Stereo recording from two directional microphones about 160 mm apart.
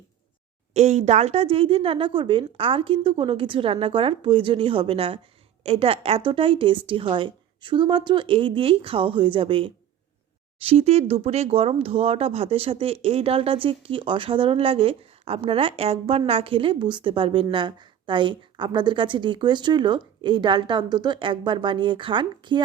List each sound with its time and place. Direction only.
0.7 s speech: 45° right (ahead or behind)